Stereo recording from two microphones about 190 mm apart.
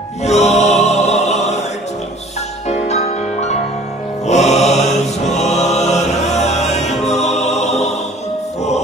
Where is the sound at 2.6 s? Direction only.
35° left (ahead or behind).